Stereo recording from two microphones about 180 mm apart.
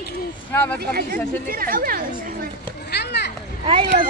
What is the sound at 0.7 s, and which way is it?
A child's voice, 55° right (ahead or behind).